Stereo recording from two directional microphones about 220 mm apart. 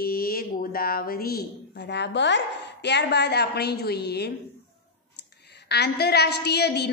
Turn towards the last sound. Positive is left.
turn(degrees=50)  # may be behind; listen again after turning